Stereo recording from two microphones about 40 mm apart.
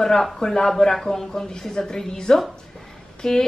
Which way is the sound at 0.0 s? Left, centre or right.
Centre.